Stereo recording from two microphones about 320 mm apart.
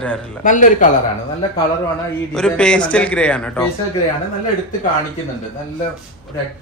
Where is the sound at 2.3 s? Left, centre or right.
Centre.